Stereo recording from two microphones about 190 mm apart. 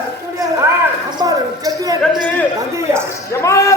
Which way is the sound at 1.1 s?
20° right (ahead or behind).